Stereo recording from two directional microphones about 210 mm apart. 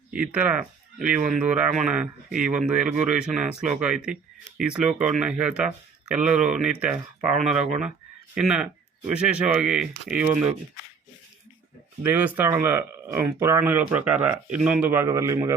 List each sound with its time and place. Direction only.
0.2 s speech: 5° right (ahead or behind)
12.0 s speech: 10° right (ahead or behind)